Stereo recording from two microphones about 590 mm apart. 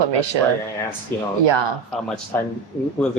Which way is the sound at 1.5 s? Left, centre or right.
Right.